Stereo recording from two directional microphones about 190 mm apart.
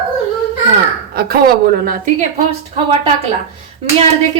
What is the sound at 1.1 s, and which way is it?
Speech, 50° right (ahead or behind).